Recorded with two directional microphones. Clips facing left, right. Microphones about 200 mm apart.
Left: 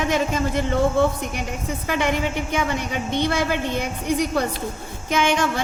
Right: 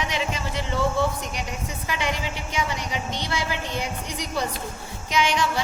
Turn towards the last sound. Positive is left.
turn(degrees=50)  # may be behind; listen again after turning